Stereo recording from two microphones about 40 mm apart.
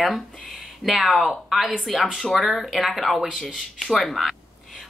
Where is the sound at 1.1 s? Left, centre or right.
Centre.